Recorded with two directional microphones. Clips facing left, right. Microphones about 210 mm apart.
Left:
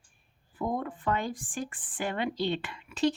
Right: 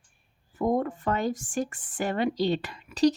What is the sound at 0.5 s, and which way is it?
Speech, 45° right (ahead or behind).